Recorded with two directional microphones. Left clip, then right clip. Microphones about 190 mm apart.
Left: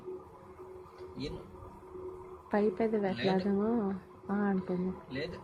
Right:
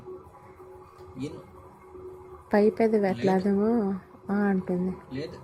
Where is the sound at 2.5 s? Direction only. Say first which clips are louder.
Right 8 dB; 20° right (ahead or behind).